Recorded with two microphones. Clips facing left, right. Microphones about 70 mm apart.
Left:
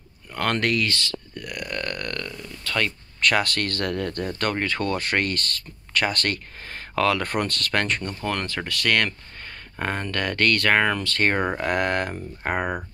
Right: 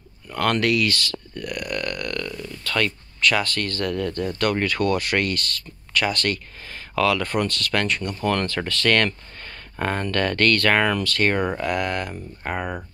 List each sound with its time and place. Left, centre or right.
0.3 s speech: left
2.2 s speech: left
3.2 s speech: left
8.2 s speech: centre; by 12.7 s left